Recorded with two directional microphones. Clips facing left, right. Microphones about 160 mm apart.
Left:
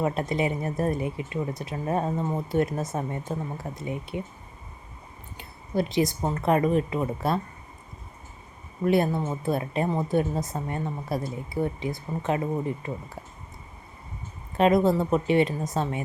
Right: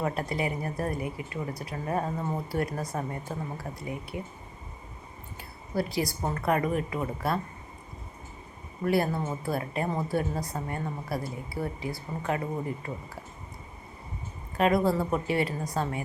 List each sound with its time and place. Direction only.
0.0 s speech: 20° left (ahead or behind)
5.4 s speech: 20° left (ahead or behind)
8.8 s speech: 20° left (ahead or behind)
14.5 s speech: 25° left (ahead or behind)